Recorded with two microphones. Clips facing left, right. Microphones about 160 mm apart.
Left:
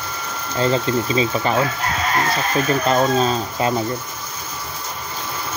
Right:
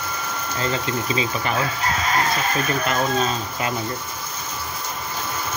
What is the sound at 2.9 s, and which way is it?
Speech, 35° left (ahead or behind).